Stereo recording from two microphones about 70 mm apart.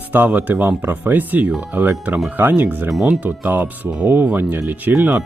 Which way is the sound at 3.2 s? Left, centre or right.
Right.